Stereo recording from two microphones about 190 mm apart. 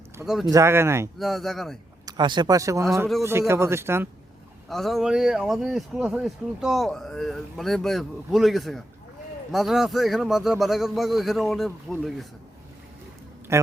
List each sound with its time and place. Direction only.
0.3 s speech: centre (ahead or behind)
0.5 s speech: 15° right (ahead or behind)
1.2 s speech: centre (ahead or behind)
2.0 s speech: 25° right (ahead or behind)
4.7 s speech: centre (ahead or behind)
13.5 s speech: 15° right (ahead or behind)